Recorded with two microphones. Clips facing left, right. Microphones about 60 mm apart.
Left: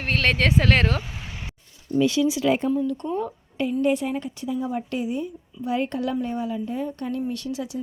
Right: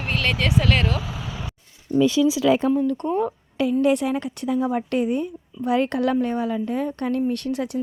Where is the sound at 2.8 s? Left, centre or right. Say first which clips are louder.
Right 4 dB; right.